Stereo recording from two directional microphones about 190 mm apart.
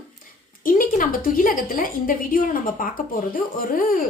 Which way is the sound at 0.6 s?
45° left (ahead or behind).